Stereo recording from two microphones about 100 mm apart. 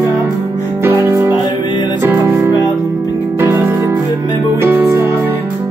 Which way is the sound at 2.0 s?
20° right (ahead or behind).